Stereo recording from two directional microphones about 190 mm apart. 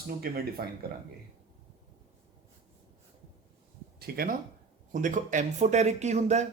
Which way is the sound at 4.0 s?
50° right (ahead or behind).